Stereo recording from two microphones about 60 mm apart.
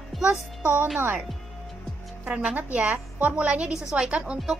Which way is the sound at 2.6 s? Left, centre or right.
Right.